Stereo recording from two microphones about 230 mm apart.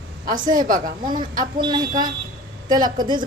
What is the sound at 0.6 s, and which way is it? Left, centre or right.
Speech, right.